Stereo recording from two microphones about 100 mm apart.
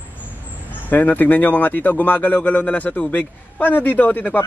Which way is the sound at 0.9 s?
20° left (ahead or behind).